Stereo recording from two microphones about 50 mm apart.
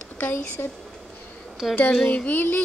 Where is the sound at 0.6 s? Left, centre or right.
Left.